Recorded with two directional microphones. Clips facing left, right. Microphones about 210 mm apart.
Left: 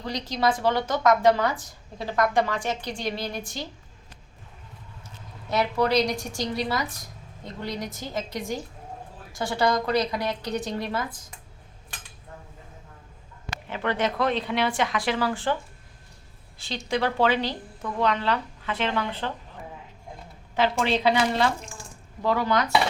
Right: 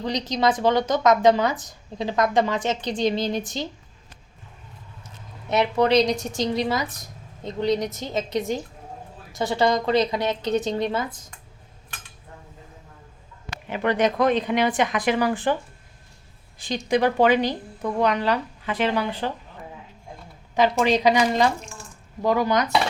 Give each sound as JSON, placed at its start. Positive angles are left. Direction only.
{"t": 0.0, "sound": "speech", "side_deg": -20}
{"t": 5.5, "sound": "speech", "side_deg": -20}
{"t": 13.7, "sound": "speech", "side_deg": -15}
{"t": 16.6, "sound": "speech", "side_deg": -15}
{"t": 20.6, "sound": "speech", "side_deg": -15}